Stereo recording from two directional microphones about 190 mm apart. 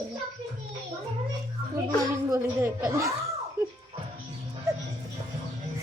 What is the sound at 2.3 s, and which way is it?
Chuckle, 15° right (ahead or behind).